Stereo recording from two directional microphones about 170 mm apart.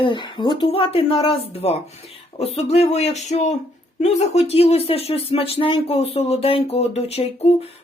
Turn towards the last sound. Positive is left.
turn(degrees=35)  # may be behind; listen again after turning